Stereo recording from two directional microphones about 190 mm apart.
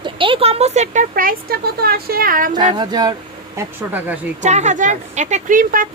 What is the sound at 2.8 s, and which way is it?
Speech, 20° right (ahead or behind).